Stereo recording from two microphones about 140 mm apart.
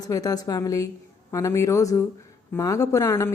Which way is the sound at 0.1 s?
25° left (ahead or behind).